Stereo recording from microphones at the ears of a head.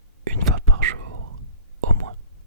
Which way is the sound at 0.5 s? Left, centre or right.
Right.